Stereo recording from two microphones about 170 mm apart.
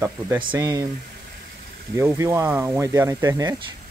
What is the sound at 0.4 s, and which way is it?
Speech, 25° right (ahead or behind).